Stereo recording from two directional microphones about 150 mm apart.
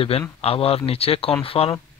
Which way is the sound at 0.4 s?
40° left (ahead or behind).